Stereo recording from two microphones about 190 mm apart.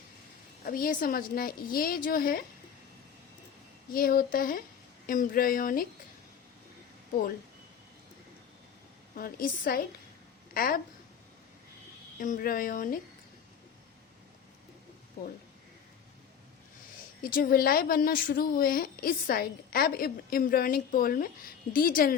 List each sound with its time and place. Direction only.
0.6 s a woman's voice: 50° left (ahead or behind)
3.9 s a woman's voice: 50° left (ahead or behind)
9.1 s a woman's voice: 50° left (ahead or behind)
12.2 s a woman's voice: 45° left (ahead or behind)
17.2 s a woman's voice: 50° left (ahead or behind)